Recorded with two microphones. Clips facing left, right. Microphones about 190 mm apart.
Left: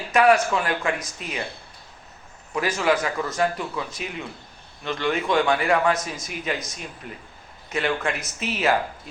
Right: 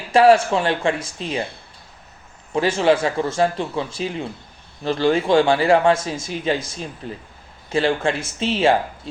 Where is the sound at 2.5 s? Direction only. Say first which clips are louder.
Right 5 dB; 30° right (ahead or behind).